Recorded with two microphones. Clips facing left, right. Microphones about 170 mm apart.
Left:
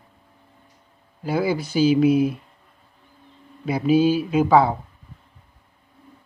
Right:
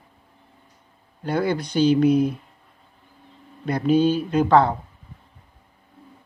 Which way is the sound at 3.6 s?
5° left (ahead or behind).